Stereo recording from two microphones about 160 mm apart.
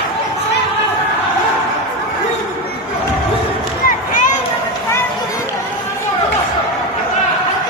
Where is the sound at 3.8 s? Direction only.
55° left (ahead or behind).